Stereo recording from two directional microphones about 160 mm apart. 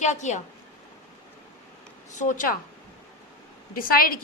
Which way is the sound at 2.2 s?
55° left (ahead or behind).